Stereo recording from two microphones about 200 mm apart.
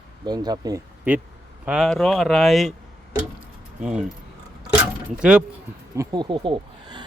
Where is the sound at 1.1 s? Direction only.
5° right (ahead or behind).